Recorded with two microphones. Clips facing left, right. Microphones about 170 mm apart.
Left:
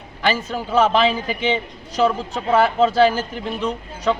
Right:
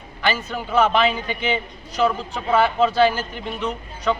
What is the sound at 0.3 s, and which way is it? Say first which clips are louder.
A man's voice: left 2 dB; 35° left (ahead or behind).